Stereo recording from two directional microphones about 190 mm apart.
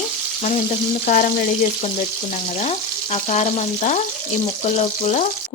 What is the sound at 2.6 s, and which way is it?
A woman's voice, 35° left (ahead or behind).